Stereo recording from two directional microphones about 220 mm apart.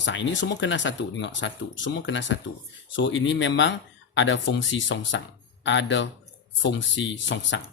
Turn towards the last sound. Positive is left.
turn(degrees=55)  # may be behind; listen again after turning